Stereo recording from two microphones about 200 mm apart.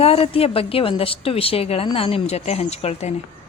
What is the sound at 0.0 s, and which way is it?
A woman's voice, 30° left (ahead or behind).